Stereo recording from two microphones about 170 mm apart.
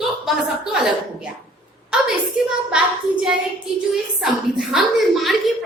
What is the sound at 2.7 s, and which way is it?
A woman's voice, 5° right (ahead or behind).